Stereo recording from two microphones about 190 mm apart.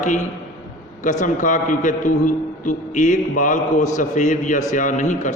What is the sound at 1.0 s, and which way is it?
A man's voice, 40° left (ahead or behind).